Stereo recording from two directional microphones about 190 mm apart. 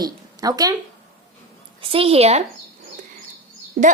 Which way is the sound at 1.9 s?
30° right (ahead or behind).